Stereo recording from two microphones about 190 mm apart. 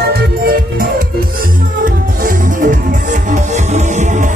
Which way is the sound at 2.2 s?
45° right (ahead or behind).